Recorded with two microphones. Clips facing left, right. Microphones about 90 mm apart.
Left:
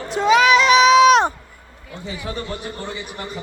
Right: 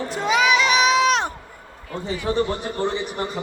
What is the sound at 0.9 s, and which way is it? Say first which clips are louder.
Run: left 7 dB; 75° left (ahead or behind).